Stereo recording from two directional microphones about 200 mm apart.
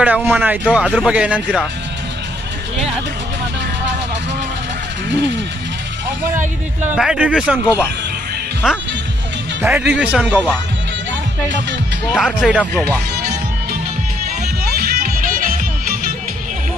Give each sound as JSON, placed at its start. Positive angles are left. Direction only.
{"t": 0.0, "sound": "speech", "side_deg": -5}
{"t": 6.9, "sound": "speech", "side_deg": -5}
{"t": 12.2, "sound": "speech", "side_deg": 0}
{"t": 12.7, "sound": "speech", "side_deg": 10}
{"t": 15.0, "sound": "music", "side_deg": -45}